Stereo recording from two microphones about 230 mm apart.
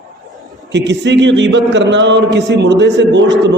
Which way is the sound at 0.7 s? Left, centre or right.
Right.